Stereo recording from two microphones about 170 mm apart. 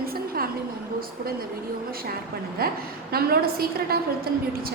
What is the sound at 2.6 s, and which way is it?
Speech, 65° right (ahead or behind).